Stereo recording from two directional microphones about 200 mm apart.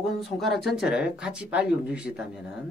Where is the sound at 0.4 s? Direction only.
Centre (ahead or behind).